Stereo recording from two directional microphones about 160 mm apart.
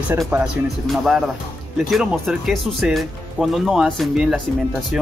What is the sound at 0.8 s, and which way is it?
Speech, centre (ahead or behind).